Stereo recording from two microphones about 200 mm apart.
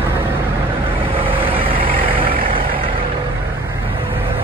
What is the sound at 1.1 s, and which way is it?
Vehicle, 25° right (ahead or behind).